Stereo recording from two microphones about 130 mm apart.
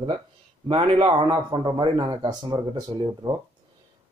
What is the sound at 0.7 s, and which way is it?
Speech, 40° right (ahead or behind).